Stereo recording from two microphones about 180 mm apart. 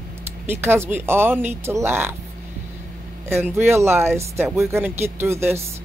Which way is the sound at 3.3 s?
15° right (ahead or behind).